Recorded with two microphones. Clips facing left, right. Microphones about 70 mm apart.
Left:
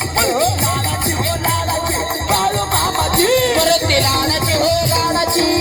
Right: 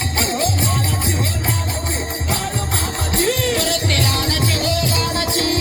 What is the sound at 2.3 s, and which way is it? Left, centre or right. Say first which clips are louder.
Music: left 8 dB; left.